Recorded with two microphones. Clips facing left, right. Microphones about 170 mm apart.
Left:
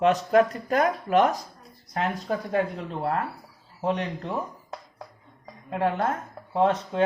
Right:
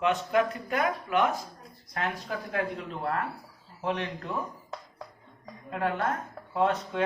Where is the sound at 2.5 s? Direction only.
30° left (ahead or behind).